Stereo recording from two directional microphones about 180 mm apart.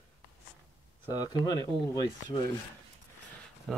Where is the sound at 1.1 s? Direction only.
20° left (ahead or behind).